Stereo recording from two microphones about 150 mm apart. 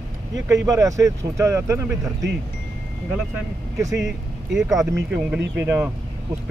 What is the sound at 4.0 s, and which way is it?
Speech, 5° right (ahead or behind).